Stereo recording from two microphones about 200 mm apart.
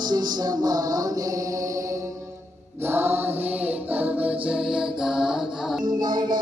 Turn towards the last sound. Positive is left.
turn(degrees=-20)  # may be behind; listen again after turning